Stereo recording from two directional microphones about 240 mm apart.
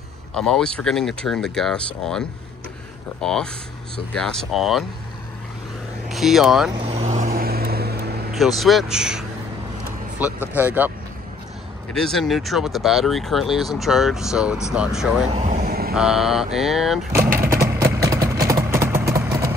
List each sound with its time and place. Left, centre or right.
0.4 s speech: centre
6.0 s speech: centre
6.8 s vehicle: right
8.3 s speech: centre
11.9 s speech: centre
15.2 s vehicle: right
15.9 s speech: centre
17.4 s vehicle: centre